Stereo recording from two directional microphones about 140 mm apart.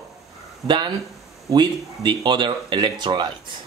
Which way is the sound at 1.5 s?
35° right (ahead or behind).